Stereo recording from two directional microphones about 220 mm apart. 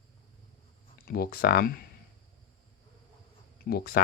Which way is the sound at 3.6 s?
45° left (ahead or behind).